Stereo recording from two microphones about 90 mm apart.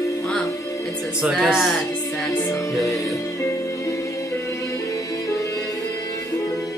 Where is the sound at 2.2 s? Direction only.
45° left (ahead or behind).